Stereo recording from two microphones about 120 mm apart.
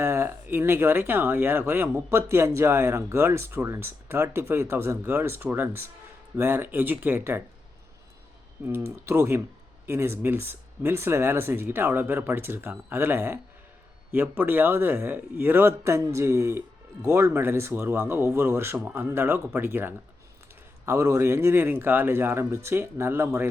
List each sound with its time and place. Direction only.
0.0 s a man's voice: 20° right (ahead or behind)
8.6 s a man's voice: 20° right (ahead or behind)